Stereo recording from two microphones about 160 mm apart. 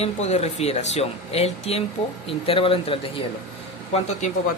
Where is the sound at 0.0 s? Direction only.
45° left (ahead or behind).